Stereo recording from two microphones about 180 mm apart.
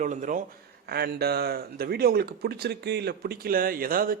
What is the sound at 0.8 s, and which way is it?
Speech, 60° right (ahead or behind).